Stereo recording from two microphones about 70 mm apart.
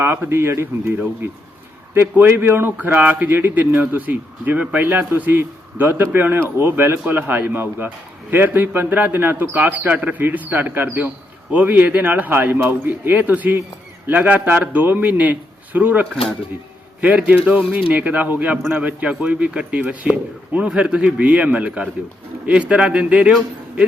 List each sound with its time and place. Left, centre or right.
0.0 s a man's voice: right; by 23.3 s centre